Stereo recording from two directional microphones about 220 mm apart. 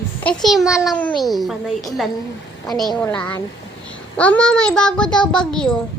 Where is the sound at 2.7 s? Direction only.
Centre (ahead or behind).